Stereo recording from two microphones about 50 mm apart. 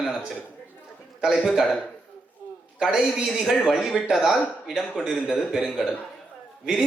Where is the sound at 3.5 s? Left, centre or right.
Centre.